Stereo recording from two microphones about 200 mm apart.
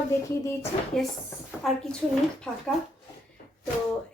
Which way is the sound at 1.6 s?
Centre (ahead or behind).